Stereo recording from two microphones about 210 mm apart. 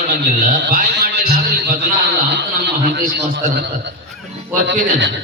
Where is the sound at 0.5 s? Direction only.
50° right (ahead or behind).